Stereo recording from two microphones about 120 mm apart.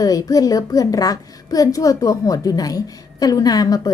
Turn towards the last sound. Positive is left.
turn(degrees=30)  # may be behind; listen again after turning